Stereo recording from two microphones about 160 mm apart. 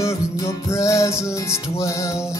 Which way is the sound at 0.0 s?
15° left (ahead or behind).